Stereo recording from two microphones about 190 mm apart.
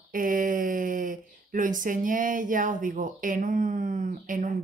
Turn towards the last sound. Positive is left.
turn(degrees=-45)  # may be behind; listen again after turning